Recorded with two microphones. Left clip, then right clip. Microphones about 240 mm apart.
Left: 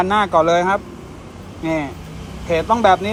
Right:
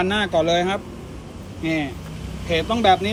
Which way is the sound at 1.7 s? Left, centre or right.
Left.